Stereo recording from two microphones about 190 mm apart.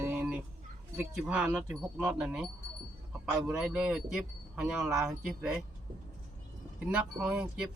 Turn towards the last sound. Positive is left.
turn(degrees=-5)  # may be behind; listen again after turning